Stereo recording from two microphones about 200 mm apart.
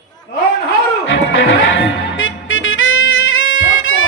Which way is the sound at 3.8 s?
80° left.